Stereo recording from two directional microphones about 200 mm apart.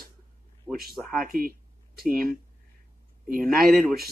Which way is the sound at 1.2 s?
45° right (ahead or behind).